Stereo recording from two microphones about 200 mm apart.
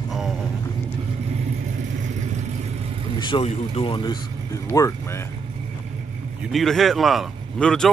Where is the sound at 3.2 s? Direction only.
25° left (ahead or behind).